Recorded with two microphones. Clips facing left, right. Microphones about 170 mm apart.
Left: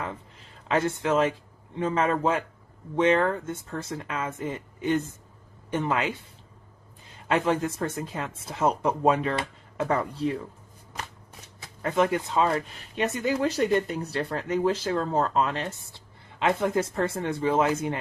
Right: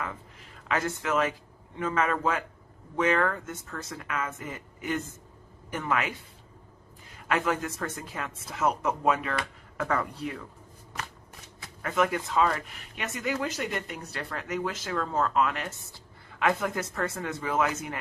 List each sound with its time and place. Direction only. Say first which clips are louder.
0.7 s speech: left 4 dB; 30° left (ahead or behind)
11.8 s speech: left 3 dB; 30° left (ahead or behind)